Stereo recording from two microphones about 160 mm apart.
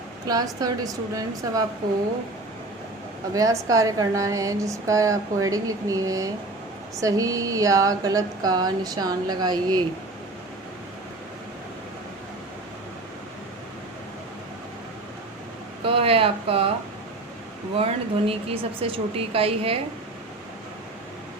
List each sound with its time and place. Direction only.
0.3 s a woman's voice: 25° right (ahead or behind)
3.3 s a woman's voice: 20° right (ahead or behind)
15.8 s speech: 35° right (ahead or behind)
17.7 s speech: 40° right (ahead or behind)